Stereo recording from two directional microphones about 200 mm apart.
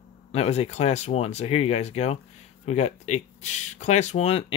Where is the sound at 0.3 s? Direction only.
30° left (ahead or behind).